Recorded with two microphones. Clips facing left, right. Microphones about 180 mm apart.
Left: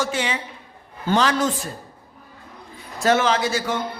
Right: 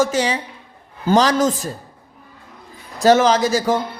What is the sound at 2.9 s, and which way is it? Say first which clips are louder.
Speech: right 6 dB; 40° right (ahead or behind).